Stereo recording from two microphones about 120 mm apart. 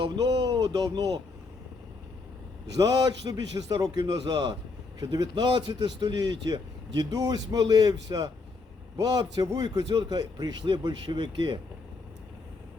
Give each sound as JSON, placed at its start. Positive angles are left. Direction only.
{"t": 0.0, "sound": "speech", "side_deg": -35}
{"t": 2.7, "sound": "speech", "side_deg": -30}